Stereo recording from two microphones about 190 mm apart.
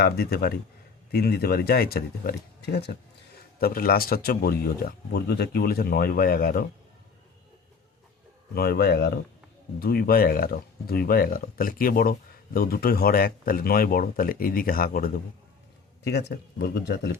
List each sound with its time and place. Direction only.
0.0 s speech: 55° left (ahead or behind)
8.5 s speech: 55° left (ahead or behind)
16.0 s speech: 60° left (ahead or behind)